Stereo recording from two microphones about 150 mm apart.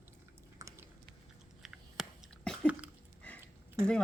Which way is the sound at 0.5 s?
20° right (ahead or behind).